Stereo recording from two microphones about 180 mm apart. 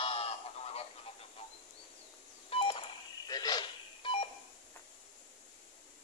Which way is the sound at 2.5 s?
30° left (ahead or behind).